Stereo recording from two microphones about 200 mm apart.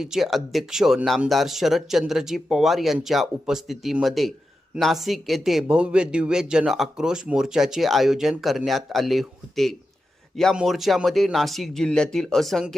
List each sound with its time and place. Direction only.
0.0 s speech: centre (ahead or behind)